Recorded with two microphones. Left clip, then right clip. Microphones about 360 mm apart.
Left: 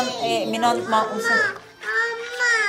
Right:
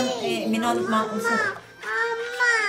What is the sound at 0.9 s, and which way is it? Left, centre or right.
Speech, centre.